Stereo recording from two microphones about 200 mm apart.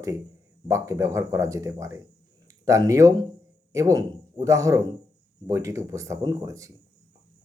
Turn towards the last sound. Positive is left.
turn(degrees=-15)  # may be behind; listen again after turning